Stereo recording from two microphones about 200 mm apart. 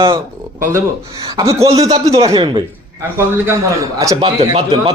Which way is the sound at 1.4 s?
20° right (ahead or behind).